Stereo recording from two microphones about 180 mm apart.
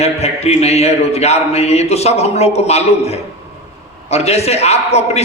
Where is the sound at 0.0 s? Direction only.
35° left (ahead or behind).